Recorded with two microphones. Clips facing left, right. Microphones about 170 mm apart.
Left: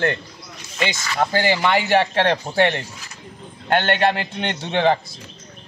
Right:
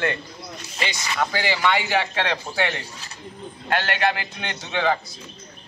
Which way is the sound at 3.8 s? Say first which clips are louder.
Left 5 dB; 55° left (ahead or behind).